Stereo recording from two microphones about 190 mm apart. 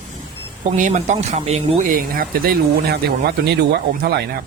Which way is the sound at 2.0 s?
50° right (ahead or behind).